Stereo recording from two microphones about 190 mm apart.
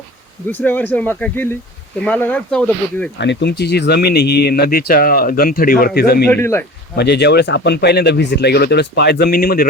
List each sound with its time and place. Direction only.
0.4 s speech: 10° left (ahead or behind)
3.2 s speech: 65° left (ahead or behind)
6.2 s speech: 15° left (ahead or behind)
6.9 s speech: 60° left (ahead or behind)